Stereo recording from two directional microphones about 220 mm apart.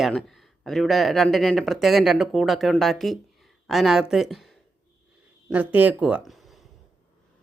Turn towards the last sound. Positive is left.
turn(degrees=0)  # may be behind; listen again after turning